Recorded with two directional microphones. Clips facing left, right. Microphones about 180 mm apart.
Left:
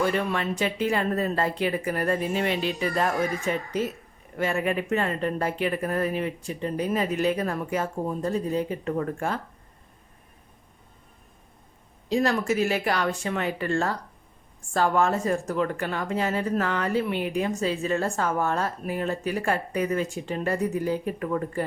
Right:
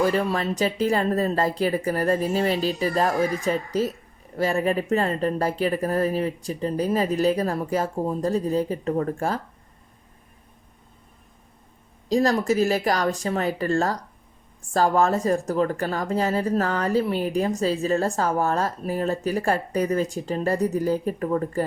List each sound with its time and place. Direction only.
0.0 s speech: 35° right (ahead or behind)
12.0 s speech: 40° right (ahead or behind)